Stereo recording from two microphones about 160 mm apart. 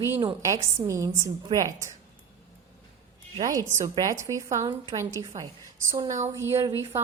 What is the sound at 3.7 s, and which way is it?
Speech, 20° right (ahead or behind).